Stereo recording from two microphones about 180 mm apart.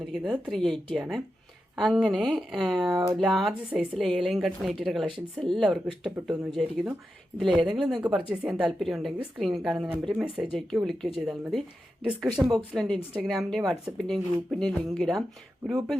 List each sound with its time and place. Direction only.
0.0 s a woman's voice: 5° right (ahead or behind)